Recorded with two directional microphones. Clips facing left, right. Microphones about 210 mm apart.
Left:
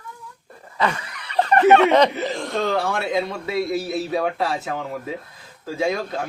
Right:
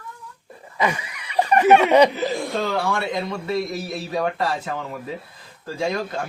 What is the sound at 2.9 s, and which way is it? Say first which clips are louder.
Speech: left 2 dB; 5° left (ahead or behind).